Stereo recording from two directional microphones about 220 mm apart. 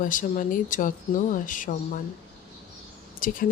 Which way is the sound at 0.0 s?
35° left (ahead or behind).